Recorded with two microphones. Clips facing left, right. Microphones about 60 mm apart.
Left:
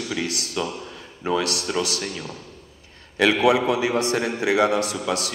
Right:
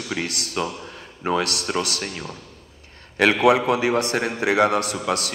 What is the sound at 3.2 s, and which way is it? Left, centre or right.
A man's voice, right.